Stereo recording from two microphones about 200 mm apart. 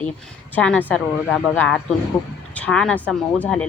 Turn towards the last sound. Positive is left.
turn(degrees=5)  # may be behind; listen again after turning